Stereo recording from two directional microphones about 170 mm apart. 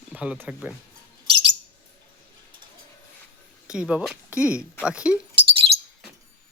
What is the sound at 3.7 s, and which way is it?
Speech, 5° right (ahead or behind).